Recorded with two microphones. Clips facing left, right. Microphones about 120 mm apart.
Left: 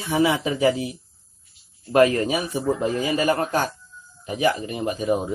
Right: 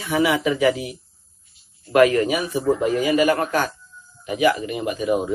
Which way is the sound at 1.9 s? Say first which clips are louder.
Right 2 dB; 30° left (ahead or behind).